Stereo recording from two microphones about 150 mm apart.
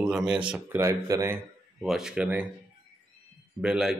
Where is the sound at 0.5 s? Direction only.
15° right (ahead or behind).